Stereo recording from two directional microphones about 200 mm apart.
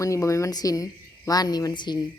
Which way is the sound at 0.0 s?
15° left (ahead or behind).